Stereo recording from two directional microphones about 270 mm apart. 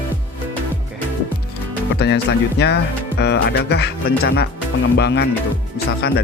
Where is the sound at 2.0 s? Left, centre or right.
Left.